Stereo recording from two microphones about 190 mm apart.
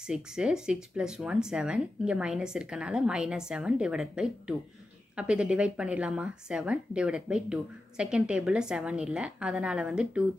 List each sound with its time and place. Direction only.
0.0 s a woman's voice: 5° right (ahead or behind)